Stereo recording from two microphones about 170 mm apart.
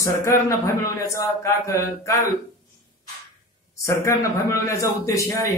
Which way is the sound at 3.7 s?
15° left (ahead or behind).